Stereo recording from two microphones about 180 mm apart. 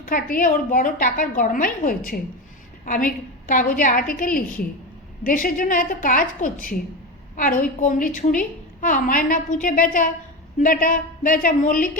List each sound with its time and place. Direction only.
0.0 s a woman's voice: 50° left (ahead or behind)